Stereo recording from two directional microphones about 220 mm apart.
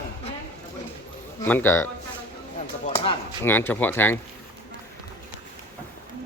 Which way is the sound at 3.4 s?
10° left (ahead or behind).